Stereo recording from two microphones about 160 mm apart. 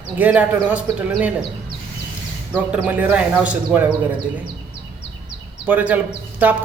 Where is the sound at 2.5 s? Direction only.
5° right (ahead or behind).